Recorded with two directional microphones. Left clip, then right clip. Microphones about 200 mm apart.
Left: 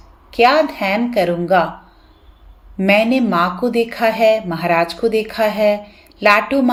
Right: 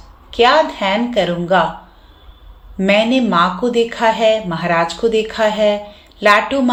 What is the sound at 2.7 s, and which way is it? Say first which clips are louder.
Speech: even; 35° left (ahead or behind).